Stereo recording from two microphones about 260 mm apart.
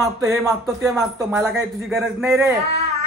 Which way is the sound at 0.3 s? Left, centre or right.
Centre.